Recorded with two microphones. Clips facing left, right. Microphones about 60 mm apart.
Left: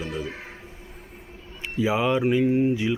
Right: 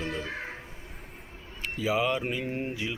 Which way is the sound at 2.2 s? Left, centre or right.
Centre.